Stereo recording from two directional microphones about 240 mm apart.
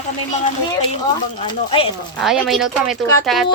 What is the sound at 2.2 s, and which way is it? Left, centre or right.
Speech, centre.